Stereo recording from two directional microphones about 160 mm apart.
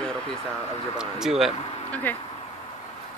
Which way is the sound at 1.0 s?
5° right (ahead or behind).